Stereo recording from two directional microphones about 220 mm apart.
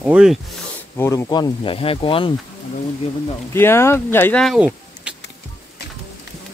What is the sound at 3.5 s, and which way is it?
Speech, 10° left (ahead or behind).